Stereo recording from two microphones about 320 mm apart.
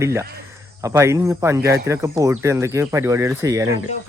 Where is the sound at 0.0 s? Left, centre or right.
Centre.